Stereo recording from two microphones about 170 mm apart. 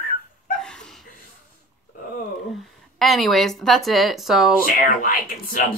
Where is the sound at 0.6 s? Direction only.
5° left (ahead or behind).